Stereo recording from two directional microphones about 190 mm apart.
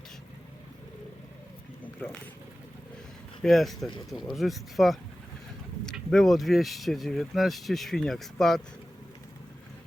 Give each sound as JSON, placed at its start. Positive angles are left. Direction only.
{"t": 3.4, "sound": "speech", "side_deg": 0}